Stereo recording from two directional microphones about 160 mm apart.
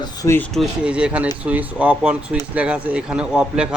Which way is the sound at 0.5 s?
5° right (ahead or behind).